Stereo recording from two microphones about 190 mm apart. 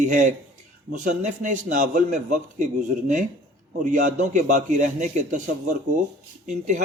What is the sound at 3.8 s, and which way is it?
A man's voice, 40° right (ahead or behind).